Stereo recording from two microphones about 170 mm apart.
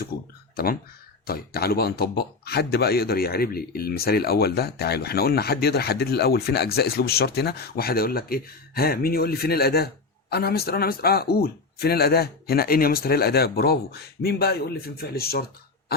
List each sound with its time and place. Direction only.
0.5 s speech: 60° left (ahead or behind)